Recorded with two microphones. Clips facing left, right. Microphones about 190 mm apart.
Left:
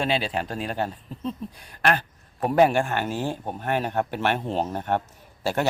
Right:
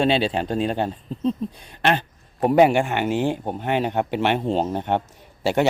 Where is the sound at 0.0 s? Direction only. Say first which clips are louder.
Right 5 dB; 25° right (ahead or behind).